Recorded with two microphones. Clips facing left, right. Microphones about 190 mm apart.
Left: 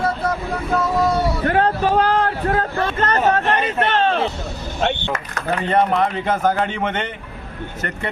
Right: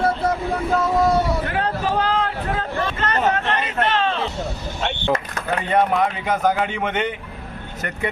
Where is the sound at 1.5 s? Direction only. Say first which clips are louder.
Left 5 dB; 40° left (ahead or behind).